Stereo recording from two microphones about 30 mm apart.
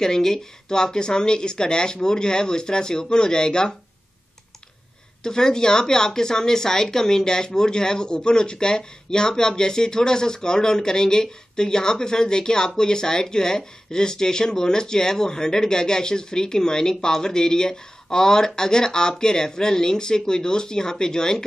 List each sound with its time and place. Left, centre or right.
0.0 s speech: centre
5.2 s speech: left